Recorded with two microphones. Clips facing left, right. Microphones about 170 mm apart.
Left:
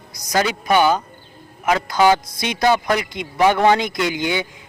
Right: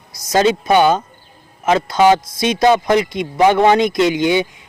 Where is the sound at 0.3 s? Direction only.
25° right (ahead or behind).